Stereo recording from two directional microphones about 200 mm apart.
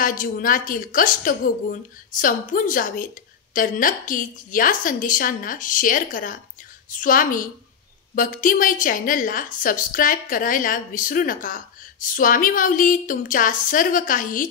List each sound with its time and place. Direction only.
0.0 s a woman's voice: 40° left (ahead or behind)